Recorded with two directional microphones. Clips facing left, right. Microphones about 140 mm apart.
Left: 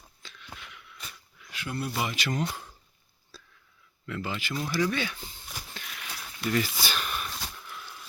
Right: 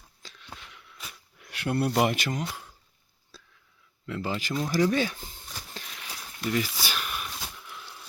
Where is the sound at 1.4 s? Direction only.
65° right (ahead or behind).